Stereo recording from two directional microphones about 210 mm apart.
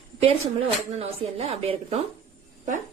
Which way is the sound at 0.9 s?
30° right (ahead or behind).